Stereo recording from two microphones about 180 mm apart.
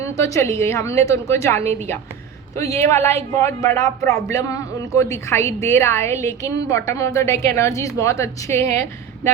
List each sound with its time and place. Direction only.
0.0 s a man's voice: 15° left (ahead or behind)